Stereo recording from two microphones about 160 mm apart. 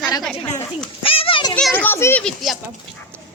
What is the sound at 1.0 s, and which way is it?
Children playing, 35° left (ahead or behind).